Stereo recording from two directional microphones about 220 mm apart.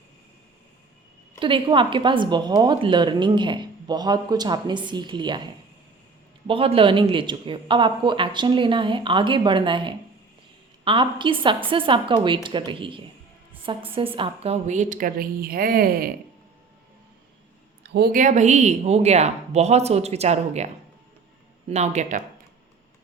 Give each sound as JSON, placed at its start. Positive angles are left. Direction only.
{"t": 1.4, "sound": "a woman's voice", "side_deg": -25}
{"t": 6.5, "sound": "a woman's voice", "side_deg": -25}
{"t": 17.8, "sound": "a woman's voice", "side_deg": -45}
{"t": 21.7, "sound": "speech", "side_deg": -30}